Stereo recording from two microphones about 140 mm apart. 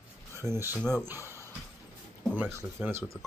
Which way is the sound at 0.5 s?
15° right (ahead or behind).